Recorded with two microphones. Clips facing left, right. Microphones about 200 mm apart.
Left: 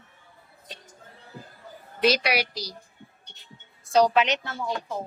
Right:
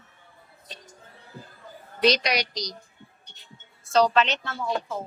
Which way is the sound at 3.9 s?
10° left (ahead or behind).